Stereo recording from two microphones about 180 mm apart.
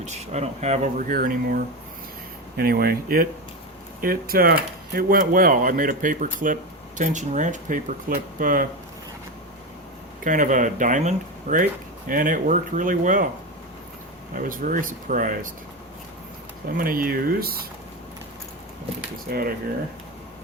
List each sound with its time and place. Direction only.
0.0 s speech: 40° right (ahead or behind)
10.2 s speech: 45° right (ahead or behind)
14.3 s speech: 50° right (ahead or behind)
16.7 s speech: 50° right (ahead or behind)
19.3 s speech: 55° right (ahead or behind)